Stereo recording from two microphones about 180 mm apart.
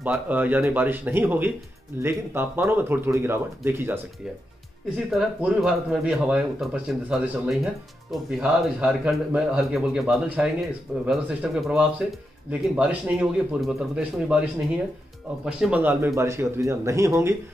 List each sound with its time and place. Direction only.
0.0 s speech: 10° right (ahead or behind)
5.1 s speech: 5° right (ahead or behind)
15.4 s speech: 5° right (ahead or behind)